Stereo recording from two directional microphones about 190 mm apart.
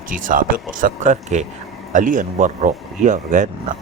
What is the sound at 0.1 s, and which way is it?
Speech, 45° right (ahead or behind).